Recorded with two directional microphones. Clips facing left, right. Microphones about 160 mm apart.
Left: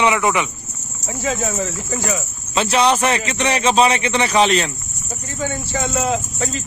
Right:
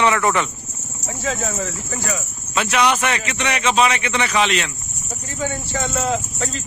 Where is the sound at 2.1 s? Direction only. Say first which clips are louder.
Left 2 dB; 30° left (ahead or behind).